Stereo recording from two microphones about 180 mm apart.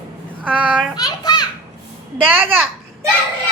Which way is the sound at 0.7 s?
Centre (ahead or behind).